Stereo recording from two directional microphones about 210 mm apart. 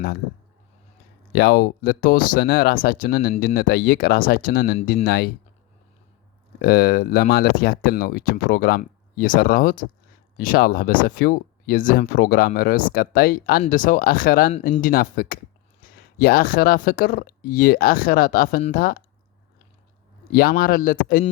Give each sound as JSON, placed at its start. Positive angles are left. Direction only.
{"t": 1.3, "sound": "speech", "side_deg": 50}
{"t": 6.6, "sound": "speech", "side_deg": 45}
{"t": 20.3, "sound": "a man's voice", "side_deg": 45}